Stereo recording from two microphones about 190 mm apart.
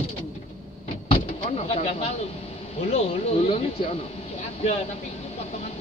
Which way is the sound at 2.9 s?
35° left (ahead or behind).